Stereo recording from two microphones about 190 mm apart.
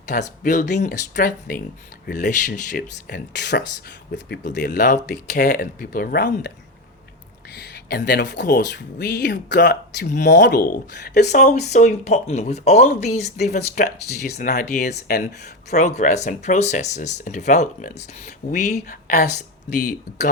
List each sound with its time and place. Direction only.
0.1 s speech: 45° left (ahead or behind)
4.8 s speech: 40° left (ahead or behind); by 6.5 s 60° left (ahead or behind)
7.5 s speech: 60° left (ahead or behind)
11.3 s speech: 40° left (ahead or behind)
14.9 s speech: 55° left (ahead or behind)
15.7 s speech: 40° left (ahead or behind)